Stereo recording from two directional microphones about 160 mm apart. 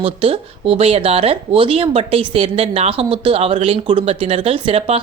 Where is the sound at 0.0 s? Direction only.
35° right (ahead or behind).